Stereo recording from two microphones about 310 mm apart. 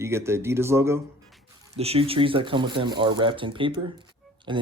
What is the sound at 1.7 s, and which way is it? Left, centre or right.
Speech, centre.